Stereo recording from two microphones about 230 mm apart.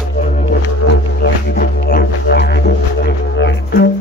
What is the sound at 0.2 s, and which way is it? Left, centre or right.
Music, left.